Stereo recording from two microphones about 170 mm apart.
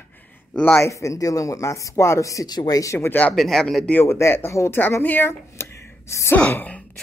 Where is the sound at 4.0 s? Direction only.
15° left (ahead or behind).